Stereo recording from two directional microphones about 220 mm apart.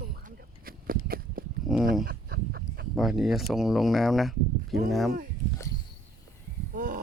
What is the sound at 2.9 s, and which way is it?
Speech, centre (ahead or behind).